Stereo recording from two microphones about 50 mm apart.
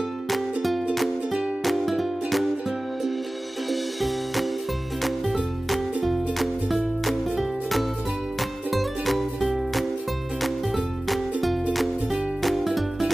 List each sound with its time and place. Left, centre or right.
0.3 s music: centre
3.6 s music: centre
11.1 s music: centre